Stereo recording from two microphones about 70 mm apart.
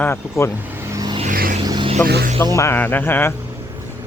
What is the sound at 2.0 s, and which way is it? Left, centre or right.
Speech, left.